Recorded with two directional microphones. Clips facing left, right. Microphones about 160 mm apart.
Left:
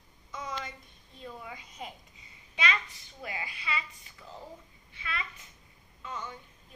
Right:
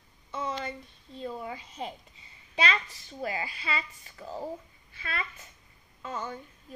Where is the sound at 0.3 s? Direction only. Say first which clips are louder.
Right 5 dB; 30° right (ahead or behind).